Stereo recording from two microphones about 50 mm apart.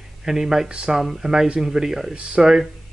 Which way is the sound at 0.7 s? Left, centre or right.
Right.